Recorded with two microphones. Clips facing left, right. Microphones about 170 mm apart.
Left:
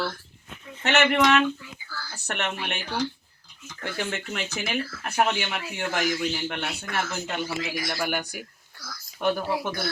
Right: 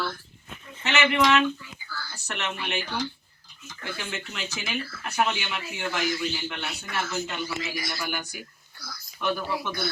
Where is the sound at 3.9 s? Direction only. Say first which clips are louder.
Left 6 dB; 55° left (ahead or behind).